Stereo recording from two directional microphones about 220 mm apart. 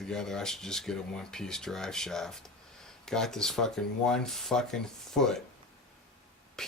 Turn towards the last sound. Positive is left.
turn(degrees=0)  # may be behind; listen again after turning